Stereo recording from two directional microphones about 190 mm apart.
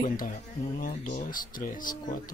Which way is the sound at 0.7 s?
45° left (ahead or behind).